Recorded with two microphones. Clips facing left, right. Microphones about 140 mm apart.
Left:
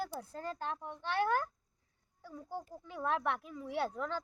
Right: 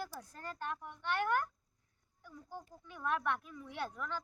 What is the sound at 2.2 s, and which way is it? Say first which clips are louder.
A child's voice: left 6 dB; 30° left (ahead or behind).